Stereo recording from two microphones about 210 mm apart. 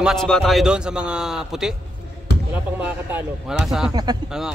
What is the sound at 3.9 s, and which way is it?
Speech, 20° right (ahead or behind).